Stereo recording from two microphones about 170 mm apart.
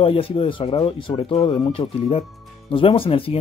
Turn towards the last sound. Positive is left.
turn(degrees=35)  # may be behind; listen again after turning